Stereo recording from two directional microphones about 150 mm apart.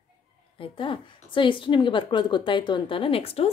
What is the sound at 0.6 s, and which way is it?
Speech, 35° left (ahead or behind).